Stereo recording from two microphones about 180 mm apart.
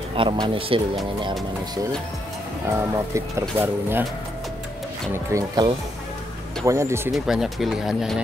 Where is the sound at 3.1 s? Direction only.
15° right (ahead or behind).